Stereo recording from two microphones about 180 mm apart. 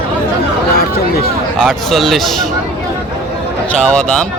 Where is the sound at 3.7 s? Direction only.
5° left (ahead or behind).